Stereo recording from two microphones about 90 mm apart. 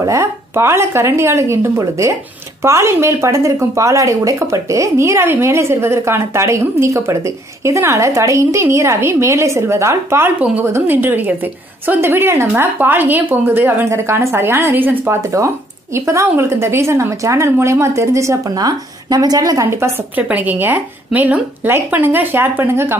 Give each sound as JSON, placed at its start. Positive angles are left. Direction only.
{"t": 0.0, "sound": "a woman's voice", "side_deg": -35}
{"t": 20.2, "sound": "a woman's voice", "side_deg": -15}